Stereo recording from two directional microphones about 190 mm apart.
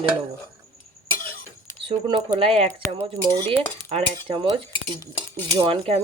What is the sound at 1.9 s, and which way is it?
Speech, 25° right (ahead or behind).